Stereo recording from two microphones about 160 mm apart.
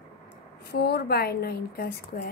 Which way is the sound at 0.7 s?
80° left.